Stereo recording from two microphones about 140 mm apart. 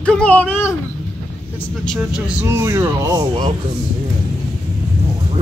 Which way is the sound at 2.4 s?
20° right (ahead or behind).